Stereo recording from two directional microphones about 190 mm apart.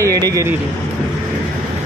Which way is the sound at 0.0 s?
15° right (ahead or behind).